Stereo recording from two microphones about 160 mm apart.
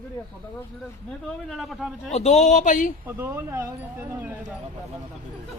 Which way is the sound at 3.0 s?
15° right (ahead or behind).